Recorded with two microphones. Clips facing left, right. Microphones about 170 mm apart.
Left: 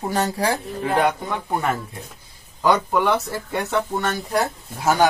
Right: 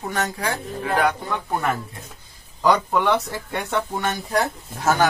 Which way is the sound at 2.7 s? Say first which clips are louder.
Even; 5° left (ahead or behind).